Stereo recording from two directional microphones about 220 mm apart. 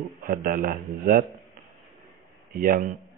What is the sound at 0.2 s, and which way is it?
Speech, 40° right (ahead or behind).